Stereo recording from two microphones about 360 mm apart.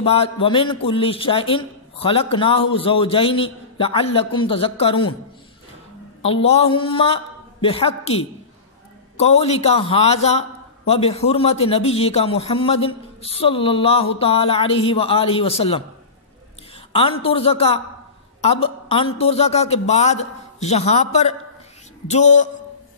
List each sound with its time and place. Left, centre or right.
0.0 s a man's voice: centre
6.2 s a man's voice: centre
16.9 s a man's voice: centre